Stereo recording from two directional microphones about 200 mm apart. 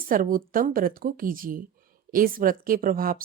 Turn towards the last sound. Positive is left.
turn(degrees=-45)  # may be behind; listen again after turning